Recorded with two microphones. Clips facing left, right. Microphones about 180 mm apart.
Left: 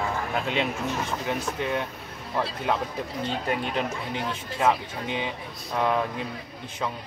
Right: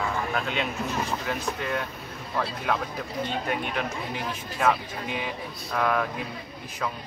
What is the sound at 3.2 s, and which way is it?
Speech, 30° left (ahead or behind).